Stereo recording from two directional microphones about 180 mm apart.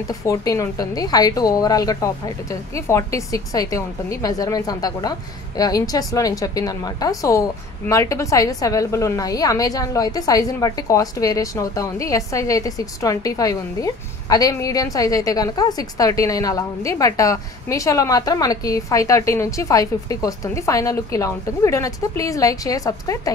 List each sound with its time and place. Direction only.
0.1 s a woman's voice: 20° left (ahead or behind)